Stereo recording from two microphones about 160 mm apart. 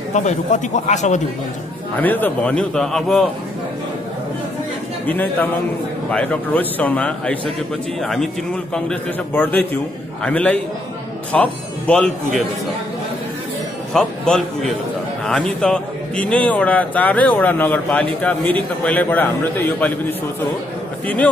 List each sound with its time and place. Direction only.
0.1 s a man's voice: 50° left (ahead or behind)
2.0 s a man's voice: 10° left (ahead or behind)
5.0 s a man's voice: 10° left (ahead or behind)
13.9 s a man's voice: 5° left (ahead or behind)